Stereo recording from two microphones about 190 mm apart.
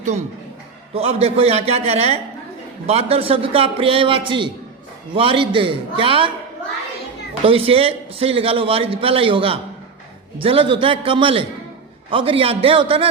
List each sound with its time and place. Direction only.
0.9 s a man's voice: 35° right (ahead or behind)
7.4 s a man's voice: 30° right (ahead or behind)